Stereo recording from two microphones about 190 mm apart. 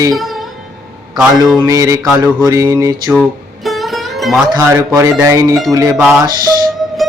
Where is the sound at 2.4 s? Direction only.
20° right (ahead or behind).